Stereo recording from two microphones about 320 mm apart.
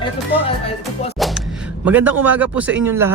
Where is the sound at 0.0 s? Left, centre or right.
Centre.